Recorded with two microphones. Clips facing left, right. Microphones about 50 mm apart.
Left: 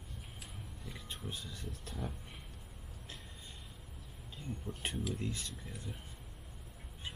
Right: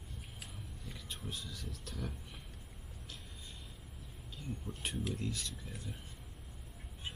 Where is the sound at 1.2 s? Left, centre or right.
Centre.